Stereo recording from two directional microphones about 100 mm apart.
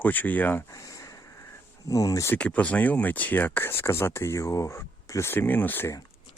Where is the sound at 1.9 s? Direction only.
35° left (ahead or behind).